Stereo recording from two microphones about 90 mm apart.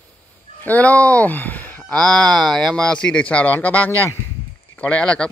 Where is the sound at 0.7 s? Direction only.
15° left (ahead or behind).